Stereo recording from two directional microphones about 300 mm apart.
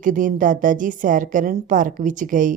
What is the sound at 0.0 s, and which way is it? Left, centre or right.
A woman's voice, right.